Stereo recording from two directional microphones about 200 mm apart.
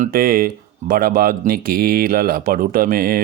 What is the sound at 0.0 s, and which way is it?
Speech, 45° right (ahead or behind).